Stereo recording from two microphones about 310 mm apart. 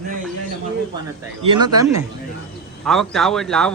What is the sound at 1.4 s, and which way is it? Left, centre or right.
Speech, centre.